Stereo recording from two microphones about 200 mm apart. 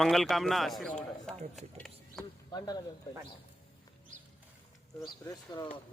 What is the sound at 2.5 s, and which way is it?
Speech, 20° left (ahead or behind).